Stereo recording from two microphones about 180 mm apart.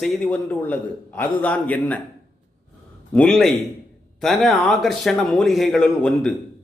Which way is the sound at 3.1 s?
5° left (ahead or behind).